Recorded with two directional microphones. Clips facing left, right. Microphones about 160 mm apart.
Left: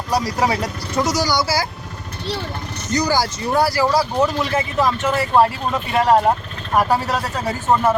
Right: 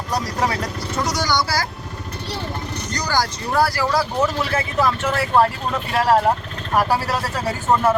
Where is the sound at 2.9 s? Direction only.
5° left (ahead or behind).